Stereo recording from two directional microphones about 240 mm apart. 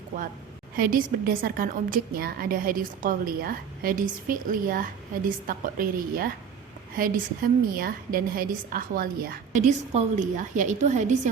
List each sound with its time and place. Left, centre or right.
0.8 s a woman's voice: right